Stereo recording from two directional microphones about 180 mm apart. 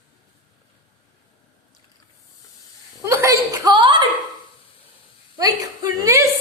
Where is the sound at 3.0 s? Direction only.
15° right (ahead or behind).